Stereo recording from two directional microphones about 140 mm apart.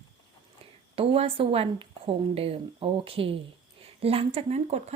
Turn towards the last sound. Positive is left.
turn(degrees=-50)  # may be behind; listen again after turning